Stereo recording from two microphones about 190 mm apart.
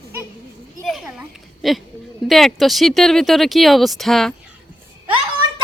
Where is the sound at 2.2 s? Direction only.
Centre (ahead or behind).